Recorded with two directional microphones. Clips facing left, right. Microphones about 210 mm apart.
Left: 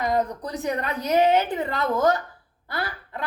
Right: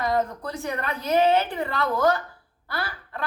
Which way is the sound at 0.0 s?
20° left (ahead or behind).